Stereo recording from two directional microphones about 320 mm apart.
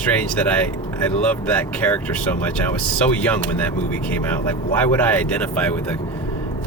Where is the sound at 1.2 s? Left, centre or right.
Centre.